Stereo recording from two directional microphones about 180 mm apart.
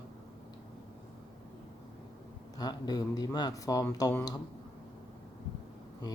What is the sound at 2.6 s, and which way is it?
Speech, 20° left (ahead or behind).